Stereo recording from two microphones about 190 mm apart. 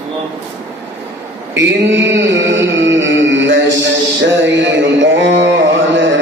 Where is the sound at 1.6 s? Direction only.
70° right (ahead or behind).